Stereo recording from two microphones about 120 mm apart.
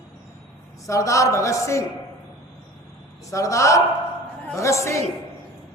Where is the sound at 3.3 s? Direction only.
25° left (ahead or behind).